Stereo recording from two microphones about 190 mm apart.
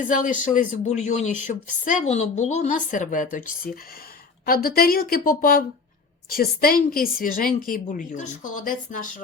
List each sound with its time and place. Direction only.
0.1 s a woman's voice: 45° left (ahead or behind)